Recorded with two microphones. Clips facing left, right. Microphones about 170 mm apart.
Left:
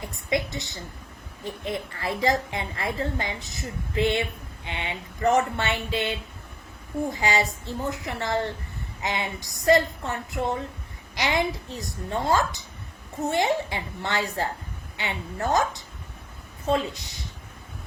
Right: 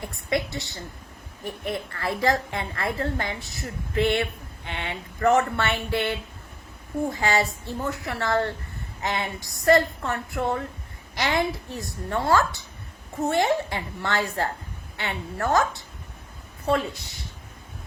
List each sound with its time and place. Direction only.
0.3 s a woman's voice: 20° left (ahead or behind)